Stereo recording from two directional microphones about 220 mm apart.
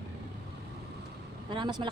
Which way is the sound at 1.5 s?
20° right (ahead or behind).